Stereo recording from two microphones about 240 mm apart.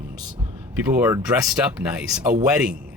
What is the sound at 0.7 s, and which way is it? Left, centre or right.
Speech, centre.